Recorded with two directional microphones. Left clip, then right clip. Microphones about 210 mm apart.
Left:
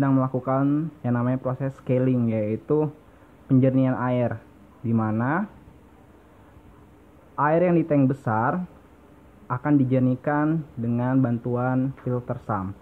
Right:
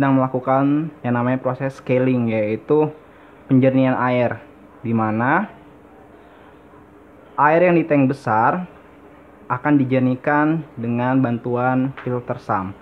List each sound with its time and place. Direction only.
0.0 s speech: 30° right (ahead or behind)
7.3 s speech: 25° right (ahead or behind)